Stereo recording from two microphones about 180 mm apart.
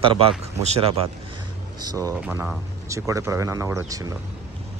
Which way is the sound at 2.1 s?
5° right (ahead or behind).